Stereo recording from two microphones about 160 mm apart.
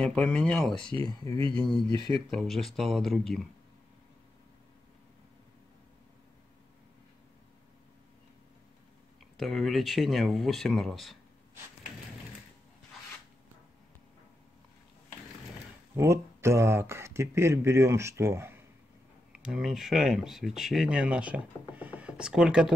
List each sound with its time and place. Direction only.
0.0 s speech: 5° left (ahead or behind)
9.4 s speech: centre (ahead or behind)
16.0 s speech: 15° right (ahead or behind)
19.3 s speech: 5° right (ahead or behind)